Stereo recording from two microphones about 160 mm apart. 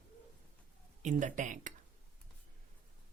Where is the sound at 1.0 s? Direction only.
50° right (ahead or behind).